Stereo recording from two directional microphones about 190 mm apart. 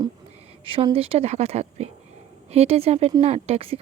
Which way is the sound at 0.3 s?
30° right (ahead or behind).